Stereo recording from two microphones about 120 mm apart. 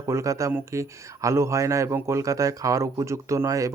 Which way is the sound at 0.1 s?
25° right (ahead or behind).